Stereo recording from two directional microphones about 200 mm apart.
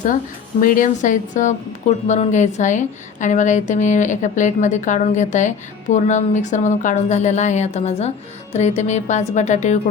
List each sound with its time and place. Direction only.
0.6 s a woman's voice: 45° left (ahead or behind)